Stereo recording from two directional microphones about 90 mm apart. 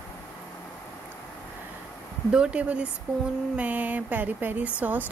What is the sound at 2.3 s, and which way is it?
A woman's voice, 10° right (ahead or behind).